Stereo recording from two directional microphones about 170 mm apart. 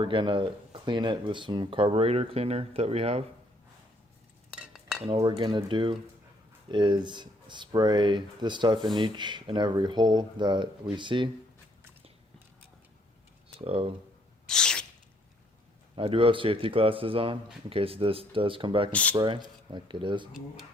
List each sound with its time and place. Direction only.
0.0 s speech: 30° right (ahead or behind)
4.5 s dishes: 5° right (ahead or behind)
5.1 s speech: 20° right (ahead or behind)
13.7 s speech: 35° right (ahead or behind)
14.4 s a sound: 5° left (ahead or behind)
16.0 s speech: 30° right (ahead or behind)
18.9 s speech: 10° left (ahead or behind)
19.1 s speech: 25° right (ahead or behind)